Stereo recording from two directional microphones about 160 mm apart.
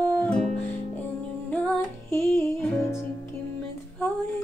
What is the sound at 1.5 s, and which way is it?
Music, 10° left (ahead or behind).